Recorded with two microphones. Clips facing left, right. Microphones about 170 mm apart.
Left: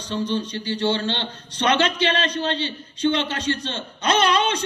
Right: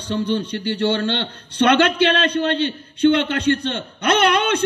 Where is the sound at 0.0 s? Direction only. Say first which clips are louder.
Right 3 dB; 60° right (ahead or behind).